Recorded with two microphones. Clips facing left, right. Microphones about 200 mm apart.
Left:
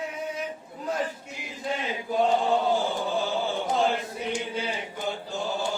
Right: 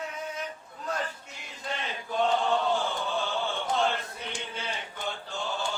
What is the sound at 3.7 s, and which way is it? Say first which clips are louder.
Chant: left 2 dB; 15° left (ahead or behind).